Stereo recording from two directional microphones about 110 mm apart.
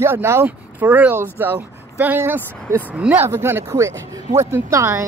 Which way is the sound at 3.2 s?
20° right (ahead or behind).